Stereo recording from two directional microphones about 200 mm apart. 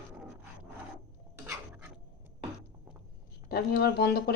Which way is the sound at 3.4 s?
50° left (ahead or behind).